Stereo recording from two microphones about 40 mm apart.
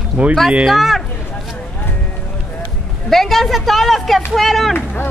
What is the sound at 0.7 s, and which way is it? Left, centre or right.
Speech, centre.